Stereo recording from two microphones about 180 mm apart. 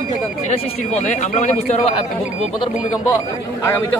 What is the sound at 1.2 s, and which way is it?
Speech, 40° left (ahead or behind).